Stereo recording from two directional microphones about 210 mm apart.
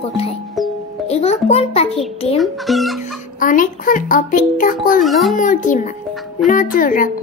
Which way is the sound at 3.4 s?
40° left (ahead or behind).